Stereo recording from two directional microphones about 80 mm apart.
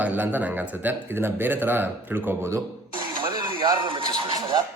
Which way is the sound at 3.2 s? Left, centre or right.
Right.